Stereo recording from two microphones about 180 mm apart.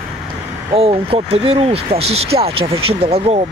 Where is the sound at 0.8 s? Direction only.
30° right (ahead or behind).